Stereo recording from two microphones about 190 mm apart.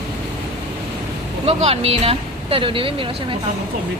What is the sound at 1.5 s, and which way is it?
Speech, 30° right (ahead or behind).